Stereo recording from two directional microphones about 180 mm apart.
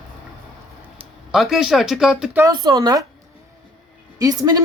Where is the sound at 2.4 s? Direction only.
20° right (ahead or behind).